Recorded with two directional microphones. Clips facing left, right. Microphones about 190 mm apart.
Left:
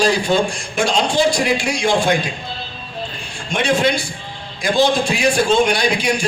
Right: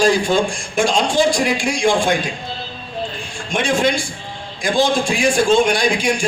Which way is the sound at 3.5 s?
50° right (ahead or behind).